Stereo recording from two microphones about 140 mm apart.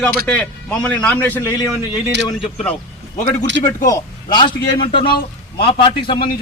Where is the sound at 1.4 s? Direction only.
30° left (ahead or behind).